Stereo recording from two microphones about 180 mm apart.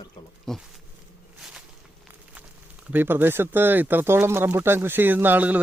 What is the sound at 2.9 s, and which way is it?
Speech, 10° right (ahead or behind).